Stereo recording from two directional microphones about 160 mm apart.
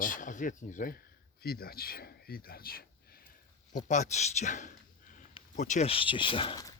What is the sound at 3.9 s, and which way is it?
Speech, 45° left (ahead or behind).